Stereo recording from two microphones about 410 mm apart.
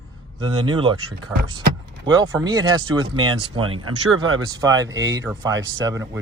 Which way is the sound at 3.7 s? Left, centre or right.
Right.